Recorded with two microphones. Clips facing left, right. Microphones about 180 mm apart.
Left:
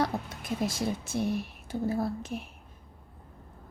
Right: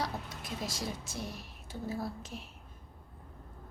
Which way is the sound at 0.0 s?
55° left (ahead or behind).